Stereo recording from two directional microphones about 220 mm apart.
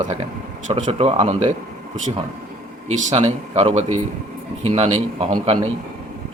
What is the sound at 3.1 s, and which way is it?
Speech, 30° right (ahead or behind).